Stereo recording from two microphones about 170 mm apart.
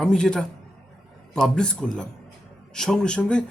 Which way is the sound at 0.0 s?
5° left (ahead or behind).